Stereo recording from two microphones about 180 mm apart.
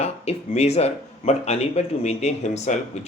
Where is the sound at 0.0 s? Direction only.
35° left (ahead or behind).